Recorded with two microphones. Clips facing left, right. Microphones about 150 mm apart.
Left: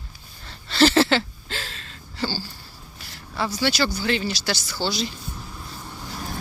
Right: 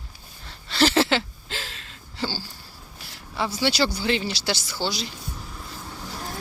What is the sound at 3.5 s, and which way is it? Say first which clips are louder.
Speech: even; 25° right (ahead or behind).